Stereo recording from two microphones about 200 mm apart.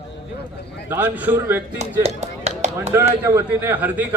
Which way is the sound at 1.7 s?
35° right (ahead or behind).